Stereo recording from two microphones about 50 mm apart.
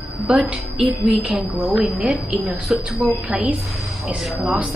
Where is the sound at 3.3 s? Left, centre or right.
Centre.